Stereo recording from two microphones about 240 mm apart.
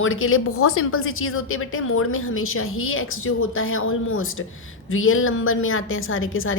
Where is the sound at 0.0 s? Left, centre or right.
Left.